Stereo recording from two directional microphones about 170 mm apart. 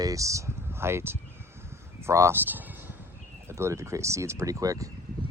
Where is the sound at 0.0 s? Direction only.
20° right (ahead or behind).